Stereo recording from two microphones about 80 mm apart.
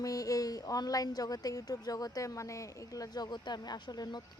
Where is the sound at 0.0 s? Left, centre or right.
Left.